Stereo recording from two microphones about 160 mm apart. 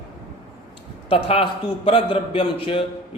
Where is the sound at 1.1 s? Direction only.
35° left (ahead or behind).